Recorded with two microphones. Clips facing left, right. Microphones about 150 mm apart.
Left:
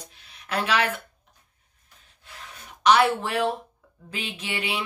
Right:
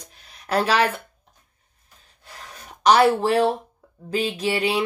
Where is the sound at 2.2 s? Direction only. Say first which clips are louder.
Right 3 dB; 40° right (ahead or behind).